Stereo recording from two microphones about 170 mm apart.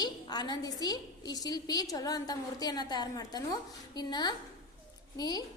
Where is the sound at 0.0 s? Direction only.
25° left (ahead or behind).